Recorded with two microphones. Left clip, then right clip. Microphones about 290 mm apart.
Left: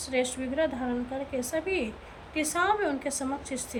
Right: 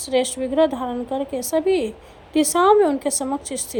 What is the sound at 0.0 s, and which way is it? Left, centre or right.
A woman's voice, centre.